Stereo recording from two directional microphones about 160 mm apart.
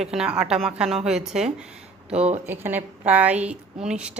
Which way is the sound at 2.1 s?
40° right (ahead or behind).